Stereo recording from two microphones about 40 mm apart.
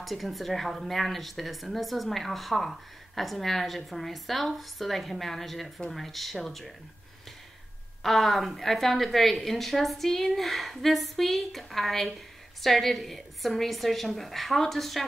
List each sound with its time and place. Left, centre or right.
0.0 s a woman's voice: centre
8.0 s a woman's voice: centre